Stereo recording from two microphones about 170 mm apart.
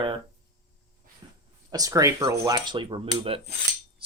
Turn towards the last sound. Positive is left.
turn(degrees=-35)  # may be behind; listen again after turning